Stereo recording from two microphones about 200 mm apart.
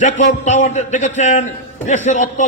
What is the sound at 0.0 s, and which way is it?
A man's voice, 35° left (ahead or behind).